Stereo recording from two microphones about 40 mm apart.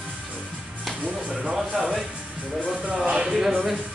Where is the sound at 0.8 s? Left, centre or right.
Centre.